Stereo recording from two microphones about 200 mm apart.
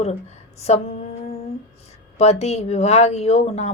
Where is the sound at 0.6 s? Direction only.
30° left (ahead or behind).